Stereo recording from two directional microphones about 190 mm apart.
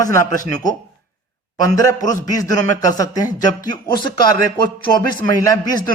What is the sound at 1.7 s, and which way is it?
A man's voice, 20° left (ahead or behind).